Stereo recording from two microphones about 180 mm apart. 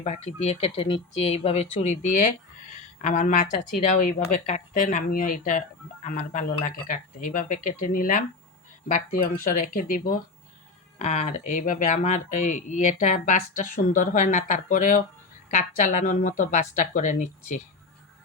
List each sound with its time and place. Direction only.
0.0 s speech: 40° left (ahead or behind)
10.9 s speech: 35° left (ahead or behind)